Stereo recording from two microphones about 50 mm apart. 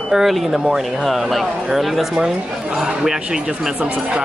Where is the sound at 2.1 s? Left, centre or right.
Centre.